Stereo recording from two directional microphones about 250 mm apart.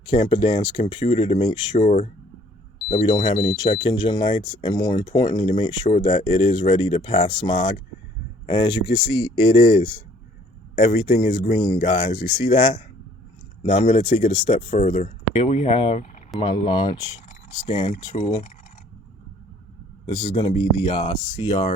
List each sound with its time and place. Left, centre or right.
0.0 s speech: left
20.1 s speech: centre